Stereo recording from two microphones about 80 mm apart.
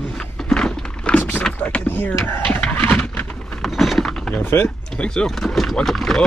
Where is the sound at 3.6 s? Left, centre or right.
Centre.